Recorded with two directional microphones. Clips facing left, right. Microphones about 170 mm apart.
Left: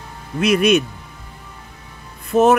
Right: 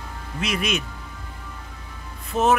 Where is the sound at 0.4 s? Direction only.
60° left (ahead or behind).